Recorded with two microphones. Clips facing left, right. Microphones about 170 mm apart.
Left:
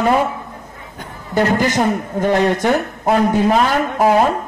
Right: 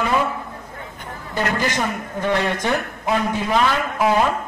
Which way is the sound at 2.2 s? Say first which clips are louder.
Left 5 dB; 40° left (ahead or behind).